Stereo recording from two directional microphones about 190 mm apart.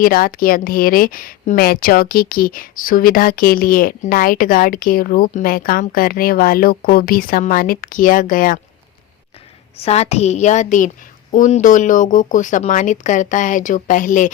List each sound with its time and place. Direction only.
0.0 s a woman's voice: 50° left (ahead or behind)
9.7 s a woman's voice: 35° left (ahead or behind)